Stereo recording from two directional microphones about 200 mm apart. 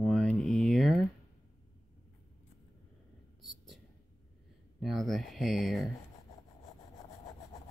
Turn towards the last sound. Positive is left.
turn(degrees=0)  # may be behind; listen again after turning